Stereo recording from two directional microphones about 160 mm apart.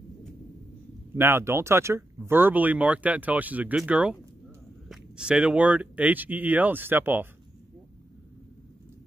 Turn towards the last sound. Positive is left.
turn(degrees=-10)  # may be behind; listen again after turning